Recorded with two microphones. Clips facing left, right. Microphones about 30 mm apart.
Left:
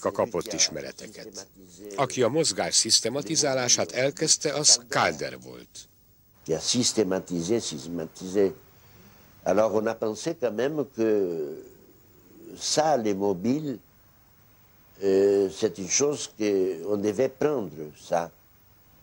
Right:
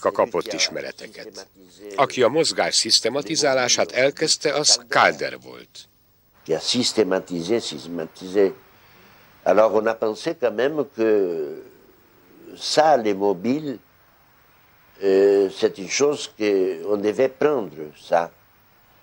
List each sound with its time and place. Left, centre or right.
0.0 s speech: right
4.1 s speech: right
15.0 s speech: right